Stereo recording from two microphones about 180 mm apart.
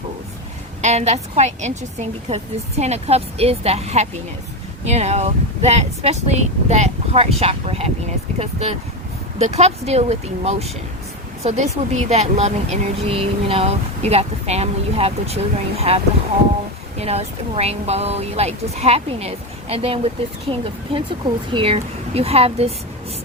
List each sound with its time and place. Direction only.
0.8 s speech: 40° right (ahead or behind)